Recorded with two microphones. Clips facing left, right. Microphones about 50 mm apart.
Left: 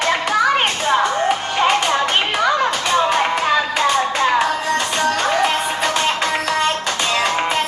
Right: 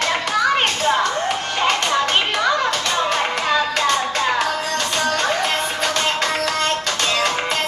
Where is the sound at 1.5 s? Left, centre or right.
Centre.